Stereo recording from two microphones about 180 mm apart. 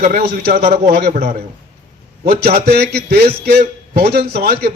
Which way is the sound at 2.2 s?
65° right (ahead or behind).